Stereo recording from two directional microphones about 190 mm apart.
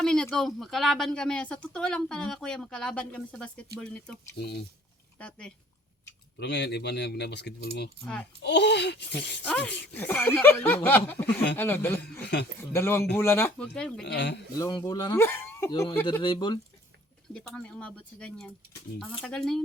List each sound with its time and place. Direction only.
0.0 s speech: 5° left (ahead or behind)
6.4 s speech: 65° left (ahead or behind)
8.0 s speech: 5° left (ahead or behind)
8.4 s speech: 65° left (ahead or behind)
9.4 s speech: 5° left (ahead or behind)
12.2 s speech: 60° left (ahead or behind)
12.7 s speech: 15° left (ahead or behind)
14.0 s speech: 65° left (ahead or behind)
14.6 s speech: 20° left (ahead or behind)
17.3 s speech: 5° left (ahead or behind)